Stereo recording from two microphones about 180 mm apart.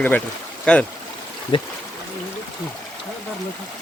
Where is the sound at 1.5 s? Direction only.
30° left (ahead or behind).